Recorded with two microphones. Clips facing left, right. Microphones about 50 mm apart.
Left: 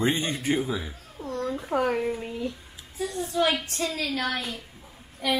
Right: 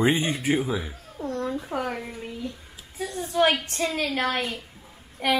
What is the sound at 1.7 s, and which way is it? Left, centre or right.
Speech, left.